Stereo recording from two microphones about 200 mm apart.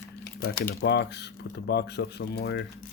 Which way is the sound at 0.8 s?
55° left (ahead or behind).